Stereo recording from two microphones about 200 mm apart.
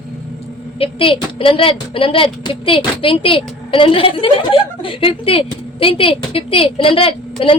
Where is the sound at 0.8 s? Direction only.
25° left (ahead or behind).